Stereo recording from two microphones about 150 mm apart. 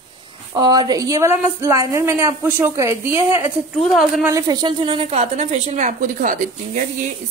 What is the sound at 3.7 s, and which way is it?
Speech, centre (ahead or behind).